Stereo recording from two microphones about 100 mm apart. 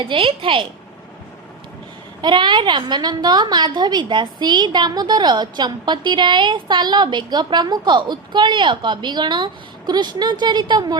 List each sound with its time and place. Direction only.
0.0 s a woman's voice: 60° right (ahead or behind)
2.2 s a woman's voice: 50° right (ahead or behind)